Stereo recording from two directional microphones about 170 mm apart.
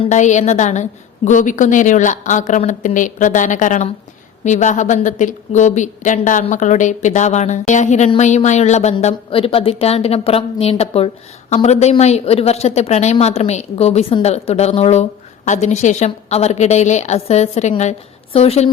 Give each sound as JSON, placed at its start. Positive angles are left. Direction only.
{"t": 0.1, "sound": "a woman's voice", "side_deg": 45}